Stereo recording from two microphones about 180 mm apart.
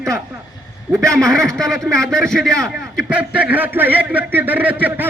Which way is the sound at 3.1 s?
10° right (ahead or behind).